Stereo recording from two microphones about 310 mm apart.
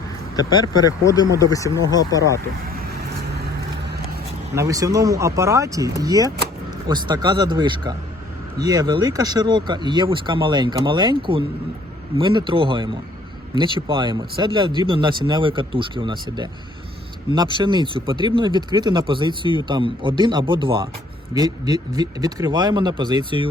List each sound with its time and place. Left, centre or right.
0.3 s speech: centre
2.7 s vehicle: right
4.5 s speech: centre